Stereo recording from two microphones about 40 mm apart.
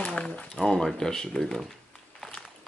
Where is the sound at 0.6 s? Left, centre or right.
Centre.